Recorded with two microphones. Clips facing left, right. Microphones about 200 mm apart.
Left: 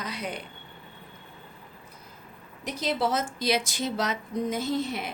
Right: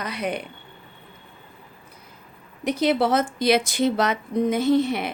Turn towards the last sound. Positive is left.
turn(degrees=-65)  # may be behind; listen again after turning